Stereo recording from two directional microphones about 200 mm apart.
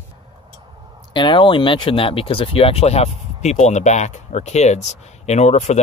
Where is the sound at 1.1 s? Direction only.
25° left (ahead or behind).